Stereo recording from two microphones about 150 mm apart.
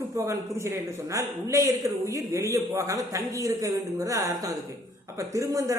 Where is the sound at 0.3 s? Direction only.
20° right (ahead or behind).